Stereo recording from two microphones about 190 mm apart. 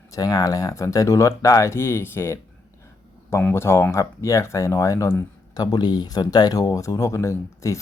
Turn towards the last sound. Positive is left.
turn(degrees=15)  # may be behind; listen again after turning